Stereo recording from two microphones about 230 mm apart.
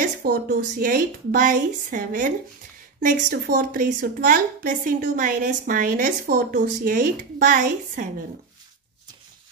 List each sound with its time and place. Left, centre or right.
0.2 s a woman's voice: right